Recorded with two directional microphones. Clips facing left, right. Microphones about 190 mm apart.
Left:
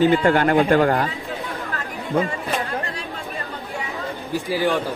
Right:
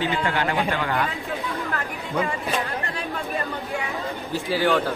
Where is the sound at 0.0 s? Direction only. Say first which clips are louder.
Left 8 dB; 50° left (ahead or behind).